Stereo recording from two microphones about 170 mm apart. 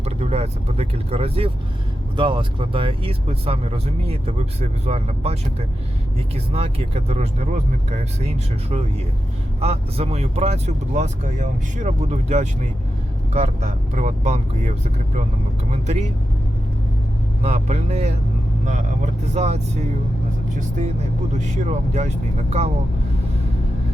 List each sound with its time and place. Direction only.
0.0 s speech: 35° right (ahead or behind)
17.4 s speech: 40° right (ahead or behind)